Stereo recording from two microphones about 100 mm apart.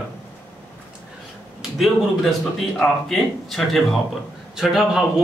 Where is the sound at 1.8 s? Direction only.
Centre (ahead or behind).